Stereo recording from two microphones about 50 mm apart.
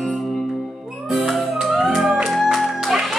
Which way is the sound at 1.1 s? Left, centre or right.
Centre.